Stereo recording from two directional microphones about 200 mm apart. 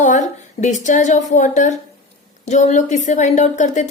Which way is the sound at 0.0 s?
35° left (ahead or behind).